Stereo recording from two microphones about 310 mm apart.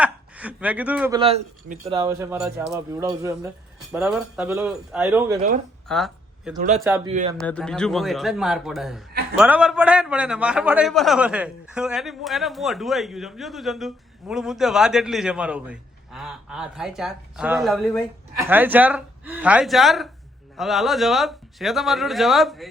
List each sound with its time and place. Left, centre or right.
0.0 s a sound: centre
1.2 s a man's voice: centre
5.9 s a sound: centre
6.6 s speech: right
6.8 s speech: centre
7.1 s speech: right
7.4 s a man's voice: centre